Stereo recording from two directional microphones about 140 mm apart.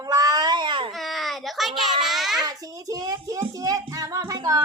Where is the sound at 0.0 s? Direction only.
25° right (ahead or behind).